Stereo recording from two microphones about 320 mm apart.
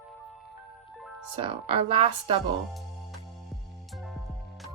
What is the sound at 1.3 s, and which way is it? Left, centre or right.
Speech, centre.